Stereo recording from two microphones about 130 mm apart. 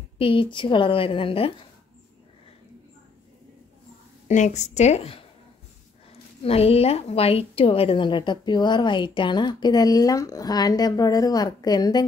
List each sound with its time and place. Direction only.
0.2 s a woman's voice: 45° left (ahead or behind)
4.3 s a woman's voice: 65° left (ahead or behind); by 5.2 s 50° left (ahead or behind)
6.4 s a woman's voice: 50° left (ahead or behind); by 12.0 s 30° left (ahead or behind)